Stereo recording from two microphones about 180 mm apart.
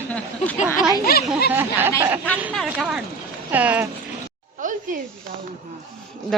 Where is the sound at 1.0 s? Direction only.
60° left (ahead or behind).